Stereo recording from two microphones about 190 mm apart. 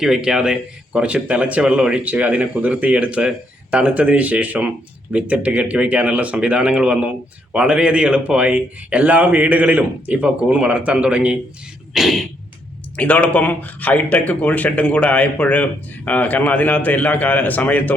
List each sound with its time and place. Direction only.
0.0 s speech: centre (ahead or behind)
11.9 s a sound: centre (ahead or behind)
13.0 s speech: 10° left (ahead or behind)